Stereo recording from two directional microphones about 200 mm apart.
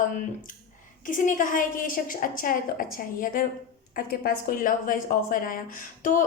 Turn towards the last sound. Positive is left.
turn(degrees=40)  # may be behind; listen again after turning